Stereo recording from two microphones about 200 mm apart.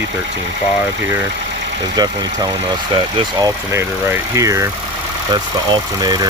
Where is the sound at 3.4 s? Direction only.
15° right (ahead or behind).